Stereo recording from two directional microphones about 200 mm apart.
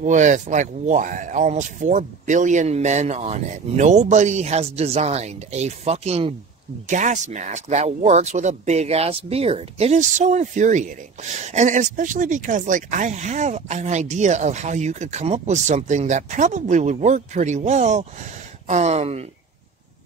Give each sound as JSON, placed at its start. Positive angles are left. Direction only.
{"t": 0.0, "sound": "speech", "side_deg": -40}